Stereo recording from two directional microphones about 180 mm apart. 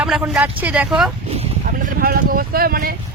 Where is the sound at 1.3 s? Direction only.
35° right (ahead or behind).